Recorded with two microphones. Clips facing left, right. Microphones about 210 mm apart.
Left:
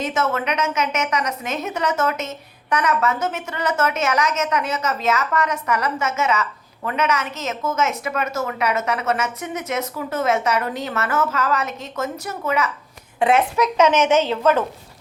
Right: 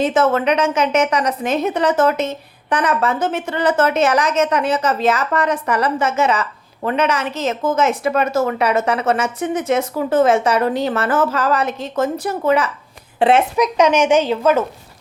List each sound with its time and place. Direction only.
0.0 s a woman's voice: 30° right (ahead or behind)
13.6 s speech: 15° right (ahead or behind)